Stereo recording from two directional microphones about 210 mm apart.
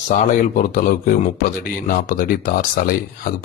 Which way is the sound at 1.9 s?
40° left (ahead or behind).